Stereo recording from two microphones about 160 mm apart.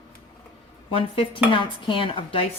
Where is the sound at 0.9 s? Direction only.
35° left (ahead or behind).